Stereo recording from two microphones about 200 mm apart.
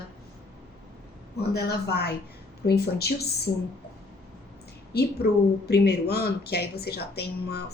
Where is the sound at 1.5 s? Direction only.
55° left (ahead or behind).